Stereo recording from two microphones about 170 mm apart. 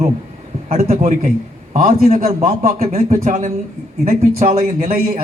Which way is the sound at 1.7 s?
55° right (ahead or behind).